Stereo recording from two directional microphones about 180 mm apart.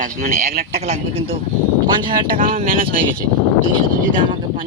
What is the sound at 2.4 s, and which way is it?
Speech, 50° right (ahead or behind).